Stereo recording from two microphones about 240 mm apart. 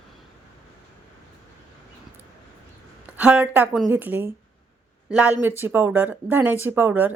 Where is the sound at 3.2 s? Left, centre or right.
Centre.